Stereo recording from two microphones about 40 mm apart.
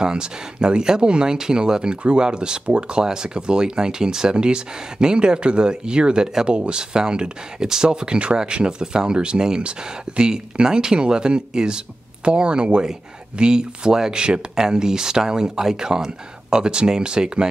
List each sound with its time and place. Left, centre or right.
0.0 s speech: right